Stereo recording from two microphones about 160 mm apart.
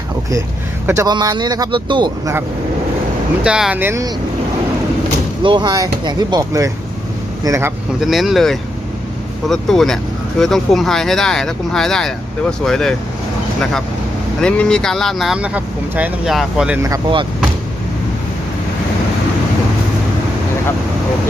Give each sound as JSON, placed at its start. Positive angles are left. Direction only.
{"t": 0.9, "sound": "speech", "side_deg": -20}
{"t": 3.4, "sound": "speech", "side_deg": -5}
{"t": 5.4, "sound": "speech", "side_deg": -30}
{"t": 8.0, "sound": "speech", "side_deg": 0}
{"t": 14.4, "sound": "speech", "side_deg": 5}
{"t": 16.8, "sound": "speech", "side_deg": -25}